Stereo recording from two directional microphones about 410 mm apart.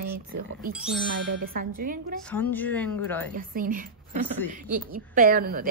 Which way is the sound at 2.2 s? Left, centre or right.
Centre.